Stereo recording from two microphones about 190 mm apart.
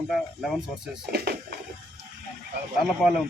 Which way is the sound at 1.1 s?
55° right (ahead or behind).